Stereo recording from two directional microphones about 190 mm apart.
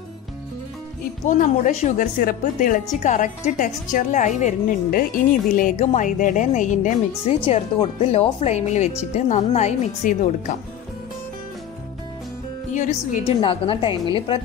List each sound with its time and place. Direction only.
1.2 s a woman's voice: 40° left (ahead or behind)
12.7 s speech: 40° left (ahead or behind)
13.4 s a woman's voice: 30° left (ahead or behind)